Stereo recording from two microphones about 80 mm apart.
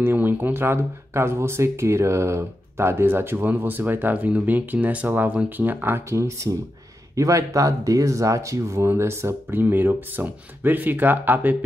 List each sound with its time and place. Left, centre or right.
0.0 s speech: right